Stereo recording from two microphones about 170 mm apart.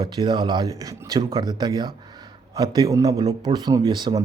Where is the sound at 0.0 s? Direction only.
25° right (ahead or behind).